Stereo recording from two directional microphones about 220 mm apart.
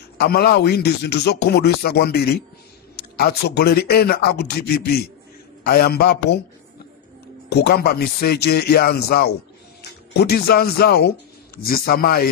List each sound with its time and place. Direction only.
0.2 s speech: 45° left (ahead or behind)
7.4 s speech: 50° left (ahead or behind)